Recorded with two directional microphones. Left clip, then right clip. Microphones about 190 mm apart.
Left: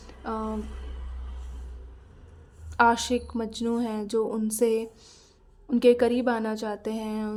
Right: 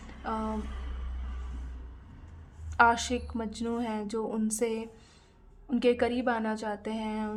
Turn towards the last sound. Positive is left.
turn(degrees=15)  # may be behind; listen again after turning